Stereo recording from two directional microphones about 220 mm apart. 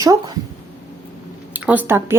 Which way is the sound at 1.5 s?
5° right (ahead or behind).